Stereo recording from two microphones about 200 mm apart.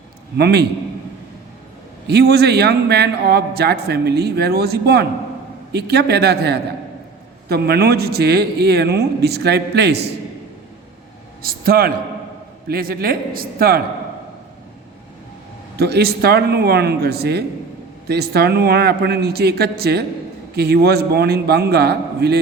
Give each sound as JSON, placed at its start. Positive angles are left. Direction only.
{"t": 0.3, "sound": "speech", "side_deg": -55}
{"t": 2.0, "sound": "a man's voice", "side_deg": -55}
{"t": 11.4, "sound": "a man's voice", "side_deg": -50}
{"t": 15.8, "sound": "a man's voice", "side_deg": -55}